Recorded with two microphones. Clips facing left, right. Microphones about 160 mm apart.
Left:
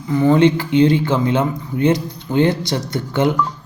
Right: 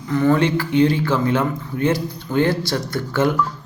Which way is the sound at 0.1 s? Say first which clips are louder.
Left 4 dB; 15° left (ahead or behind).